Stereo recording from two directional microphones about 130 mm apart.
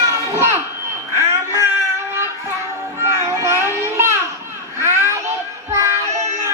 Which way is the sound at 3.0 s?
20° right (ahead or behind).